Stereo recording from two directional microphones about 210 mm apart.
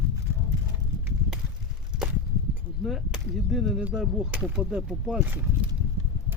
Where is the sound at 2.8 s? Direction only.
Centre (ahead or behind).